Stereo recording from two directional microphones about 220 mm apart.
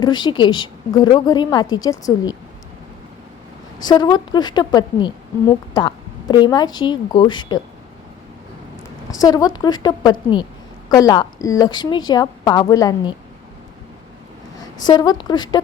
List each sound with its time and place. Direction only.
0.0 s a woman's voice: 20° left (ahead or behind)
3.8 s a woman's voice: 20° left (ahead or behind)
9.2 s a woman's voice: 15° left (ahead or behind)
14.8 s a woman's voice: 20° left (ahead or behind)